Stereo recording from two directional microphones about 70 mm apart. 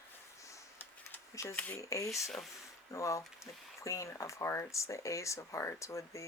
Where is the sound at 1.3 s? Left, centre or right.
Left.